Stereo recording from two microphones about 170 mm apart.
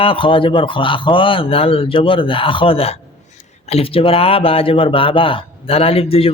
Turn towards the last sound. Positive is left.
turn(degrees=35)  # may be behind; listen again after turning